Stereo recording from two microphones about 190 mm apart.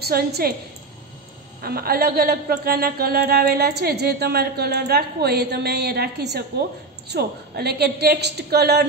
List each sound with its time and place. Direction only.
0.0 s a woman's voice: 55° right (ahead or behind)
1.6 s a man's voice: 55° right (ahead or behind)